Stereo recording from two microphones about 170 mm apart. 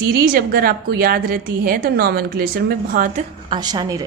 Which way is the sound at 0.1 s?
60° right (ahead or behind).